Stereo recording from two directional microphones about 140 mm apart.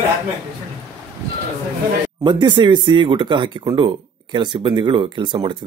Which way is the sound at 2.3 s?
35° right (ahead or behind).